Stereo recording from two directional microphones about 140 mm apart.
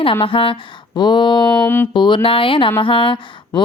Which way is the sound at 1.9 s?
35° left (ahead or behind).